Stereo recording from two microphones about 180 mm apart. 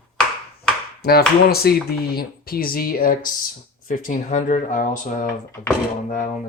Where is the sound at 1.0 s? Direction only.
60° left (ahead or behind).